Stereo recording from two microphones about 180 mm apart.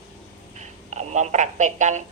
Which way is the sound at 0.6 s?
40° right (ahead or behind).